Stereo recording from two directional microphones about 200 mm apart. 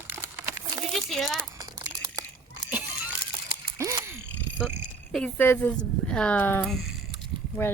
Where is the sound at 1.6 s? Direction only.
20° right (ahead or behind).